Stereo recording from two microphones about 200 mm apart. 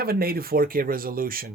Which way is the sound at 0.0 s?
50° right (ahead or behind).